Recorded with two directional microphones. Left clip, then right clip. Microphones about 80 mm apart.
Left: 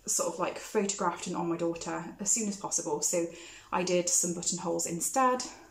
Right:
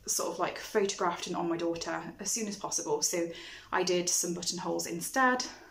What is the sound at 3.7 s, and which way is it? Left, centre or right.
Speech, left.